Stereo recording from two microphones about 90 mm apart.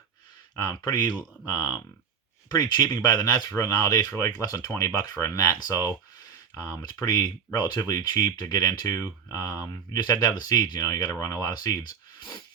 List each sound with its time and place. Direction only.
0.7 s speech: 50° left (ahead or behind)